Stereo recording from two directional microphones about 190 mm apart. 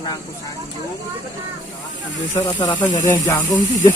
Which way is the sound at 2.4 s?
20° left (ahead or behind).